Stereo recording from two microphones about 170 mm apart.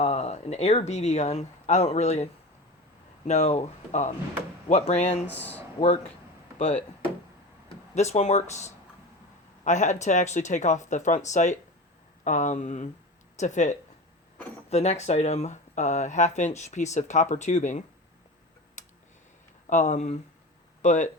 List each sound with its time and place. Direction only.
0.0 s speech: 40° left (ahead or behind)
6.6 s speech: 40° left (ahead or behind)
19.7 s speech: 45° left (ahead or behind)